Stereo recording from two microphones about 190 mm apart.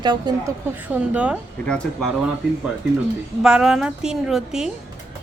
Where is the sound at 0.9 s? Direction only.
5° right (ahead or behind).